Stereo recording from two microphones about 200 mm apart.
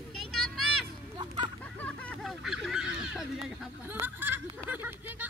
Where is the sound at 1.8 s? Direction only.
5° left (ahead or behind).